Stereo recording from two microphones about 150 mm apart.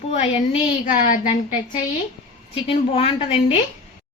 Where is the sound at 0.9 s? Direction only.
60° left (ahead or behind).